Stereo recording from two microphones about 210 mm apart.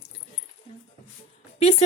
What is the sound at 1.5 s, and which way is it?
Music, 30° left (ahead or behind).